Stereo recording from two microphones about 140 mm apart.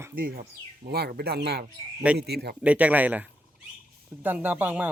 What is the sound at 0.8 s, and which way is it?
Speech, 35° right (ahead or behind).